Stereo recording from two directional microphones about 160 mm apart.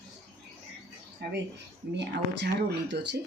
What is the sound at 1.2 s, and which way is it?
Speech, 90° right.